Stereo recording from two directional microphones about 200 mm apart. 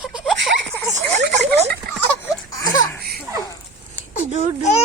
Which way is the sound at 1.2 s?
60° right (ahead or behind).